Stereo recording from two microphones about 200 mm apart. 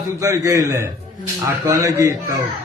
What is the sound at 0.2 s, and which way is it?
A man's voice, 15° right (ahead or behind).